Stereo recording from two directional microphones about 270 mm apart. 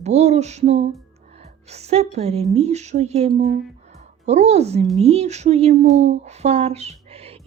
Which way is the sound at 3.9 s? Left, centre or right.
Right.